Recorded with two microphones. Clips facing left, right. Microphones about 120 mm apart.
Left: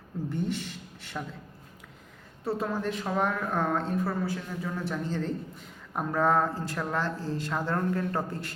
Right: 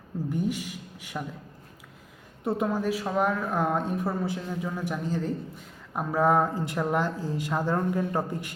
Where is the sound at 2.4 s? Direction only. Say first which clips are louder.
Right 3 dB; 20° right (ahead or behind).